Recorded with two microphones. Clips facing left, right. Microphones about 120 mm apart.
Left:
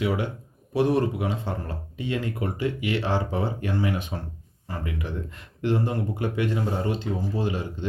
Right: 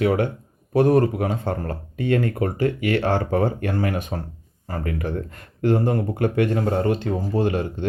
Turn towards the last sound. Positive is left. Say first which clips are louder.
# right 6 dB
turn(degrees=-55)  # may be behind; listen again after turning